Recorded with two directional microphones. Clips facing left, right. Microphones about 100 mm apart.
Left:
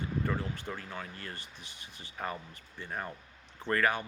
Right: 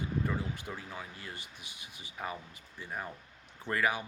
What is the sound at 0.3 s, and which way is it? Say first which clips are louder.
Speech: left 1 dB; 10° right (ahead or behind).